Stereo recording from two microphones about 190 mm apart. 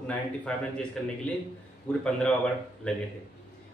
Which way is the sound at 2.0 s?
5° left (ahead or behind).